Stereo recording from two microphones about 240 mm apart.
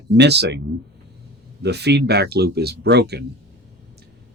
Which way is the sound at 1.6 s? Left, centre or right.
Right.